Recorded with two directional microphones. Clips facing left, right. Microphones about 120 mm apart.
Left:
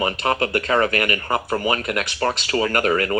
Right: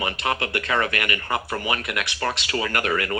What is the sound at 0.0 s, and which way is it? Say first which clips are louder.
A man's voice: left 5 dB; 35° left (ahead or behind).